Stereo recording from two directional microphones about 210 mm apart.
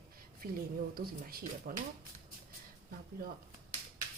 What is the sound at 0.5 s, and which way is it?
Speech, 45° right (ahead or behind).